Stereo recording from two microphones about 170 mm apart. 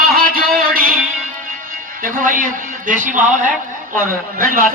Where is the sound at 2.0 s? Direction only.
55° right (ahead or behind).